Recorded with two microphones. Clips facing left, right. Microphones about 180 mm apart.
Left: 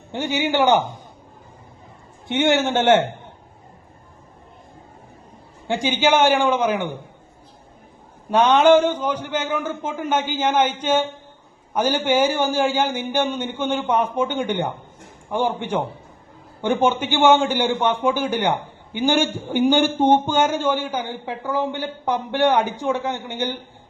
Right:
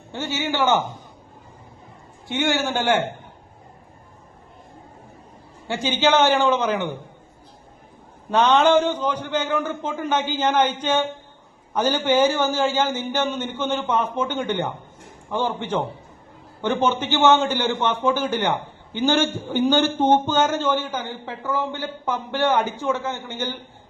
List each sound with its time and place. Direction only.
0.1 s a man's voice: 15° left (ahead or behind)
2.2 s a man's voice: 20° left (ahead or behind)
5.6 s a man's voice: 15° left (ahead or behind)
8.3 s a man's voice: 10° left (ahead or behind)